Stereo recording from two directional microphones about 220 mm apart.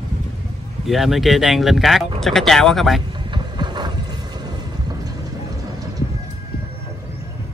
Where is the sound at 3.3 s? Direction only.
20° right (ahead or behind).